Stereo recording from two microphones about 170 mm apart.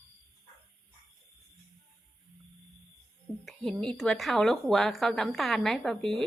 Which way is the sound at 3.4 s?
5° left (ahead or behind).